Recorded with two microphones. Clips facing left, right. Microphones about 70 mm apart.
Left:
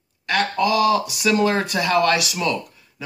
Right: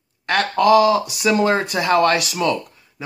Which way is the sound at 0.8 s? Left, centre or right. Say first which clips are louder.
Right 2 dB; right.